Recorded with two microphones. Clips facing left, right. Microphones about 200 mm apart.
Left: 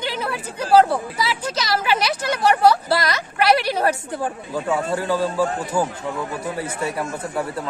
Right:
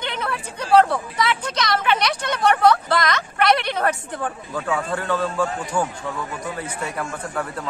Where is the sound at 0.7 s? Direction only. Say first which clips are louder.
Left 1 dB; 30° left (ahead or behind).